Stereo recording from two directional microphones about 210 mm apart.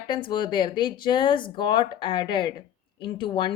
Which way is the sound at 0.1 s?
20° left (ahead or behind).